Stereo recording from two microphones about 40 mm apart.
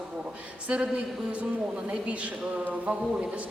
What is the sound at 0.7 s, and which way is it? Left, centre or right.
Speech, right.